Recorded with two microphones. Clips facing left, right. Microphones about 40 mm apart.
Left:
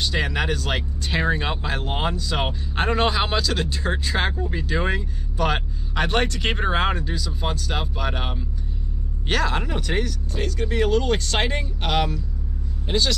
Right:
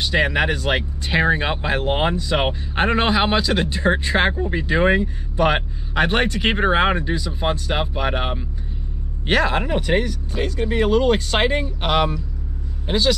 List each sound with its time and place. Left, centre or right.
0.0 s speech: centre